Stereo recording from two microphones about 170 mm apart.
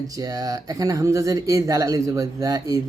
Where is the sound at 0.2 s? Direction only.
20° right (ahead or behind).